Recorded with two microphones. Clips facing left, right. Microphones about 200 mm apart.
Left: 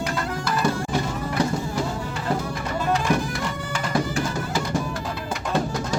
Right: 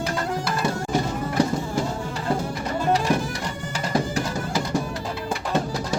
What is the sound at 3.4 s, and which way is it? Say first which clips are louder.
Music: left 1 dB; 40° right (ahead or behind).